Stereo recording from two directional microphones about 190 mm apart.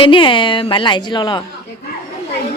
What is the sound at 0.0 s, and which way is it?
A woman's voice, 25° left (ahead or behind).